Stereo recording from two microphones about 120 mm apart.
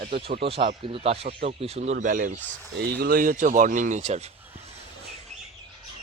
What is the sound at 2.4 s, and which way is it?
Speech, 15° left (ahead or behind).